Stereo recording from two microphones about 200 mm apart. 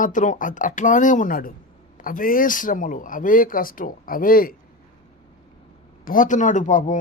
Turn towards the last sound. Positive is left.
turn(degrees=40)  # may be behind; listen again after turning